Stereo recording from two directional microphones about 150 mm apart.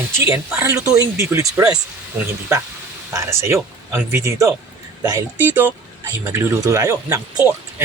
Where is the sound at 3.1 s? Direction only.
20° right (ahead or behind).